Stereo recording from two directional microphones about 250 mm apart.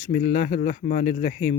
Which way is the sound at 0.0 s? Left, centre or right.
Left.